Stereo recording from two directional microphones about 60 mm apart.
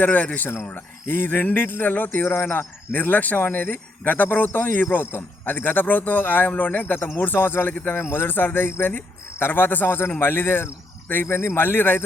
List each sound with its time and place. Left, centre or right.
0.0 s a man's voice: left